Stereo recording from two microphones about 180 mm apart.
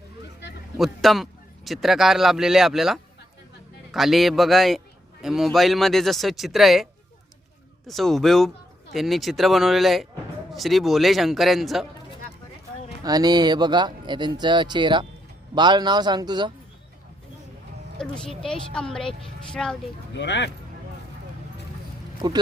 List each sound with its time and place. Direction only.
0.8 s speech: centre (ahead or behind)
7.9 s speech: centre (ahead or behind)
13.0 s speech: 20° right (ahead or behind)
18.1 s speech: 5° left (ahead or behind)
20.1 s speech: 75° left (ahead or behind)
22.2 s speech: 20° right (ahead or behind)